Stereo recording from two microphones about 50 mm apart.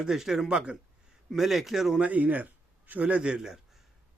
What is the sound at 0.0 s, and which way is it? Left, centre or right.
Speech, centre.